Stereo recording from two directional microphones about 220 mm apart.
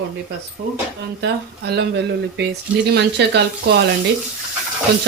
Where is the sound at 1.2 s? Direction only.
50° right (ahead or behind).